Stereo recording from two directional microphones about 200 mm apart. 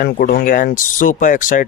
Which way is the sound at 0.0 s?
45° left (ahead or behind).